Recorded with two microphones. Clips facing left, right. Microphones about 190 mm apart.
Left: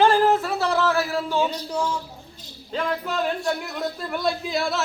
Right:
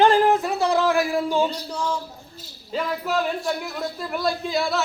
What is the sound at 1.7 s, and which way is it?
Speech, 10° left (ahead or behind).